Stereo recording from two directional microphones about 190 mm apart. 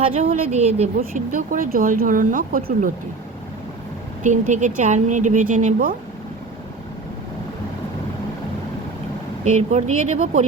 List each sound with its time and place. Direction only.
0.2 s speech: 35° right (ahead or behind)
0.9 s speech: 45° right (ahead or behind)
4.2 s speech: 40° right (ahead or behind)
9.4 s speech: 35° right (ahead or behind)